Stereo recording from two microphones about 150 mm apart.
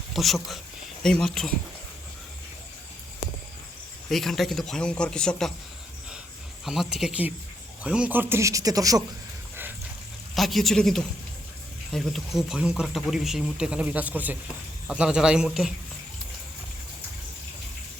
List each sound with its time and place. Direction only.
0.1 s speech: centre (ahead or behind)
4.1 s speech: centre (ahead or behind)
6.7 s speech: 5° right (ahead or behind); by 9.0 s 25° right (ahead or behind)
10.3 s speech: centre (ahead or behind)